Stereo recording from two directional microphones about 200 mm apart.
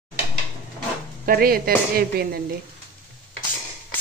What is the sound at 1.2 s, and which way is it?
A woman's voice, 45° right (ahead or behind).